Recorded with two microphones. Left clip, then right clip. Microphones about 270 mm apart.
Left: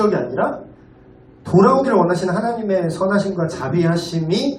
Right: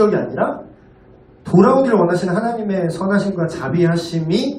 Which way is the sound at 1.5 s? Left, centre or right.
Left.